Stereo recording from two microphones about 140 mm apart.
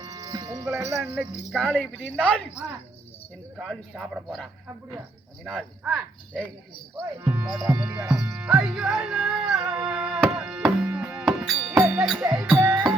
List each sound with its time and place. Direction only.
0.0 s speech: 25° right (ahead or behind)
1.5 s speech: centre (ahead or behind)
1.7 s speech: 10° left (ahead or behind)
3.6 s speech: centre (ahead or behind)
5.5 s speech: 10° right (ahead or behind)
9.6 s music: 10° right (ahead or behind)
12.0 s speech: 5° right (ahead or behind)
12.5 s music: 15° right (ahead or behind)